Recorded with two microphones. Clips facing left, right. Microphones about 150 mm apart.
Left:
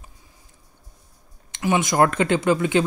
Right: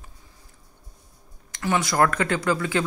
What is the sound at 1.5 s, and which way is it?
Speech, 20° left (ahead or behind).